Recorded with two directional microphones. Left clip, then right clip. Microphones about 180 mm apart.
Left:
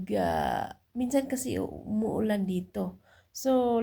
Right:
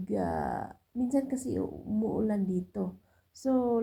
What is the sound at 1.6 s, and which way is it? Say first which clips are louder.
A woman's voice: left 1 dB; 35° left (ahead or behind).